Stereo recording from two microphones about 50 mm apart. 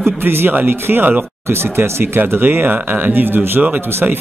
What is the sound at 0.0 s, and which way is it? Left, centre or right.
Speech, right.